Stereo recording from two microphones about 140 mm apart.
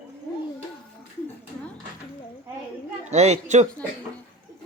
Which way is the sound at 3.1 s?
55° right (ahead or behind).